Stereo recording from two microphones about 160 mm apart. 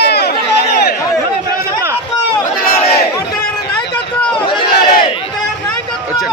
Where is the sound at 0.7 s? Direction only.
75° left (ahead or behind).